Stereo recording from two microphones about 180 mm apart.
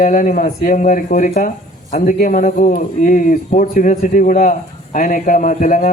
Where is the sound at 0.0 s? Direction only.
45° left (ahead or behind).